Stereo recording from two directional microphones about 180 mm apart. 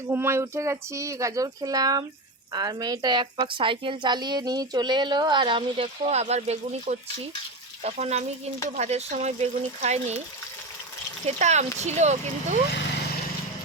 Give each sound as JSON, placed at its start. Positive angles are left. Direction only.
{"t": 0.1, "sound": "a woman's voice", "side_deg": -15}
{"t": 11.3, "sound": "speech", "side_deg": -40}